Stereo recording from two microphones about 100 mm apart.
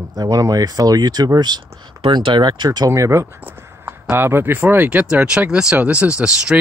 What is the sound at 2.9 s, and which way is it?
Speech, 30° right (ahead or behind).